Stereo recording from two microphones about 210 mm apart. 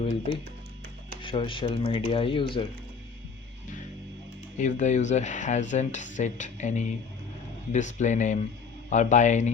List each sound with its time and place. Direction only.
0.0 s speech: 25° left (ahead or behind)
4.5 s speech: 35° left (ahead or behind)